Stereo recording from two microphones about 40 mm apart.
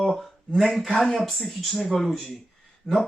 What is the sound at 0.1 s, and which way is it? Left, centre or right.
Speech, centre.